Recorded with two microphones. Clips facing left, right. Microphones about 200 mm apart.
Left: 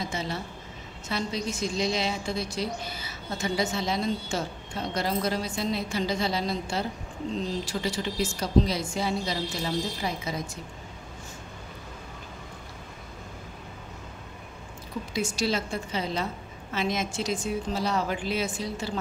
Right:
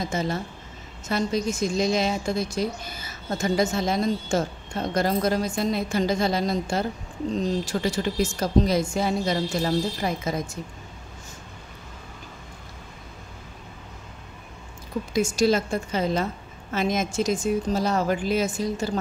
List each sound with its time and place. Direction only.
0.0 s a woman's voice: 45° right (ahead or behind)
15.1 s a woman's voice: 45° right (ahead or behind)